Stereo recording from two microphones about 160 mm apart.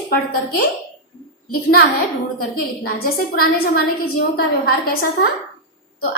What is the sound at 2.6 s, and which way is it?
A woman's voice, 65° left (ahead or behind).